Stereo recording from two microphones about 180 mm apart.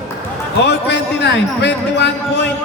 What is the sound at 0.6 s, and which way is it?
Speech, 70° left (ahead or behind).